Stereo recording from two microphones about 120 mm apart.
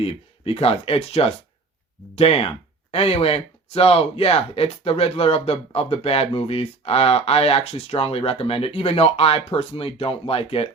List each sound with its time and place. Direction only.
0.0 s speech: 55° left (ahead or behind)